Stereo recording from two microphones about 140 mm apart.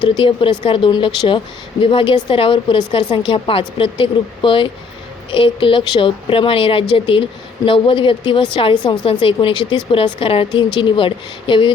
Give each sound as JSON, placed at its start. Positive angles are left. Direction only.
{"t": 0.0, "sound": "a woman's voice", "side_deg": 35}